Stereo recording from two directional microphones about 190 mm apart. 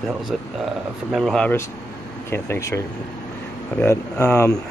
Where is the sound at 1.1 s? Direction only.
5° left (ahead or behind).